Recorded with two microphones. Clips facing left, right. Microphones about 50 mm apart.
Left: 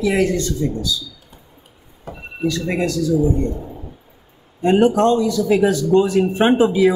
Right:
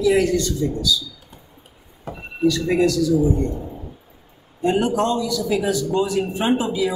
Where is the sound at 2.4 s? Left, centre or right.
Left.